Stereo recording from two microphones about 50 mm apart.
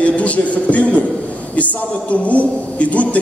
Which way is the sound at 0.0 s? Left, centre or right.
Left.